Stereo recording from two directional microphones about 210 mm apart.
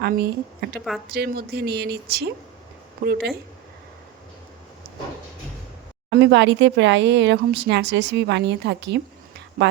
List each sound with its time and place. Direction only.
0.0 s speech: 50° right (ahead or behind)
6.1 s speech: 55° right (ahead or behind)